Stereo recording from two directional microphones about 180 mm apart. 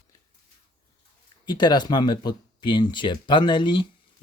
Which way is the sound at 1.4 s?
25° left (ahead or behind).